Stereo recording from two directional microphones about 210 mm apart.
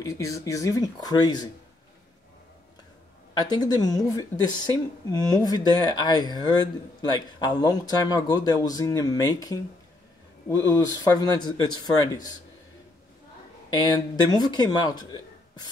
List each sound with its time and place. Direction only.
0.0 s speech: 15° left (ahead or behind)
3.3 s speech: 20° left (ahead or behind)
13.7 s speech: 20° left (ahead or behind)